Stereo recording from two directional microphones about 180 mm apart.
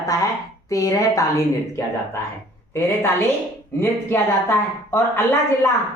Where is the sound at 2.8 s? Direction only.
15° left (ahead or behind).